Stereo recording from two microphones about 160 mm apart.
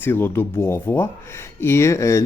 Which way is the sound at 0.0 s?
15° left (ahead or behind).